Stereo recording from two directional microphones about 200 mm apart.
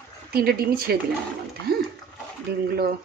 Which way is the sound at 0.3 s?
50° right (ahead or behind).